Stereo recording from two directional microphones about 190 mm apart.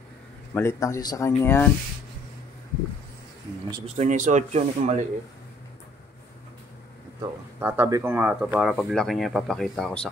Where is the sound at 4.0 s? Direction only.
40° right (ahead or behind).